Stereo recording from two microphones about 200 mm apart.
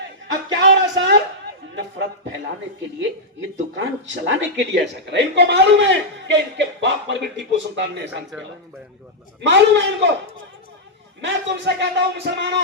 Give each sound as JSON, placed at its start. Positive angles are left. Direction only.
{"t": 0.5, "sound": "music", "side_deg": -65}
{"t": 3.8, "sound": "a woman's voice", "side_deg": -65}
{"t": 9.4, "sound": "a woman's voice", "side_deg": -60}
{"t": 11.2, "sound": "a woman's voice", "side_deg": -60}